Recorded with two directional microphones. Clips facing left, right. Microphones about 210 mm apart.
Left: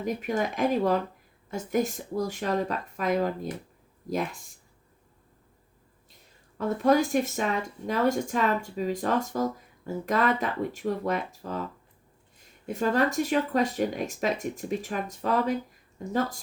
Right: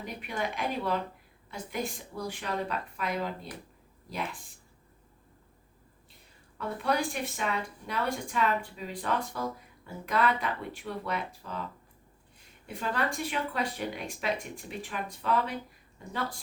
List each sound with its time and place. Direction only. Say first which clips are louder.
0.0 s speech: left 7 dB; 45° left (ahead or behind)
6.6 s speech: left 8 dB; 45° left (ahead or behind)